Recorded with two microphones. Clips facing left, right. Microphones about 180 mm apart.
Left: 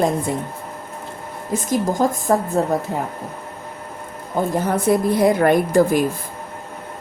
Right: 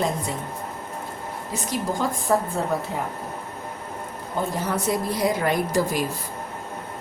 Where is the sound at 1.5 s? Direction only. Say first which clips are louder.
Left 7 dB; 45° left (ahead or behind).